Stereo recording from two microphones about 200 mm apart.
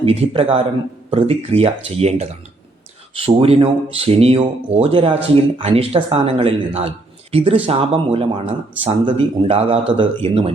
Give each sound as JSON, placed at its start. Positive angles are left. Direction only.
{"t": 0.0, "sound": "speech", "side_deg": -30}